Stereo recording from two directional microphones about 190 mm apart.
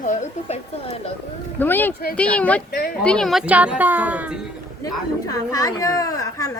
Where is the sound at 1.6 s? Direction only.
10° left (ahead or behind); by 4.4 s 5° right (ahead or behind).